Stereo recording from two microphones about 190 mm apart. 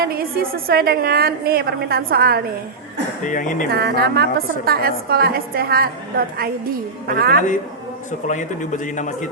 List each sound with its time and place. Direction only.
0.0 s a woman's voice: 50° right (ahead or behind)
3.2 s speech: 45° left (ahead or behind)
3.7 s a woman's voice: 55° right (ahead or behind)
8.3 s a man's voice: 40° left (ahead or behind)